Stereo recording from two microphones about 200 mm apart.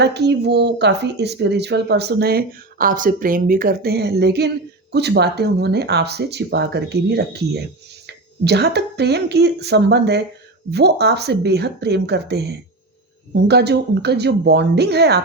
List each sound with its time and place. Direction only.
0.0 s speech: 55° right (ahead or behind)